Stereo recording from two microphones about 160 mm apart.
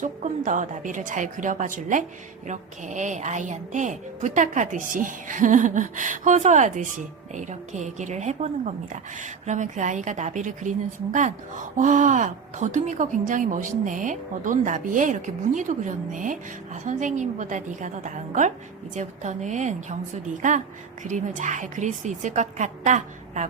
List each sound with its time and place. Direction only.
0.0 s a woman's voice: 50° right (ahead or behind)